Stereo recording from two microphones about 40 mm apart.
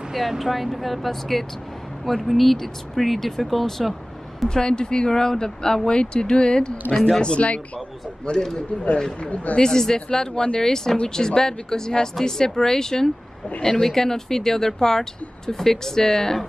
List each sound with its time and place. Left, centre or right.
0.1 s speech: centre
4.5 s speech: centre
9.2 s speech: left
9.6 s speech: centre